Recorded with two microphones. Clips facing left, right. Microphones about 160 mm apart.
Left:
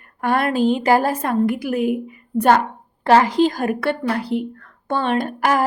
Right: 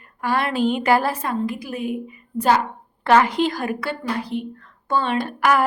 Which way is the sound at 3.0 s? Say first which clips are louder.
Left 2 dB; 35° left (ahead or behind).